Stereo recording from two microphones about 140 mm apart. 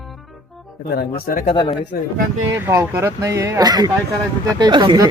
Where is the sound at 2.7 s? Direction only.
15° right (ahead or behind); by 5.1 s 35° right (ahead or behind).